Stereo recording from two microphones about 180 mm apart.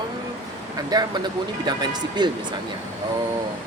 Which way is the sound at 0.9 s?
20° right (ahead or behind).